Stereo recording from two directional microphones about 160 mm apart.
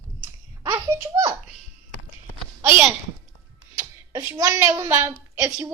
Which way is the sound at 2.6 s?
10° right (ahead or behind).